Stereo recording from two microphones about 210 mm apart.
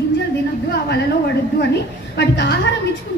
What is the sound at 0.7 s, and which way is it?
Speech, 50° left (ahead or behind).